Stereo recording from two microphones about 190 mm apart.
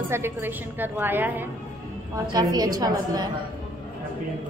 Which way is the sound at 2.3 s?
20° right (ahead or behind).